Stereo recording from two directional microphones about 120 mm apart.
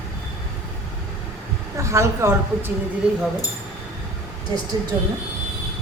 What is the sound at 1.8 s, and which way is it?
Speech, 25° right (ahead or behind).